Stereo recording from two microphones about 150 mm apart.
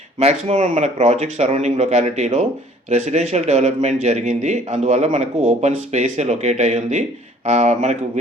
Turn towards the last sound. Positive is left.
turn(degrees=-50)  # may be behind; listen again after turning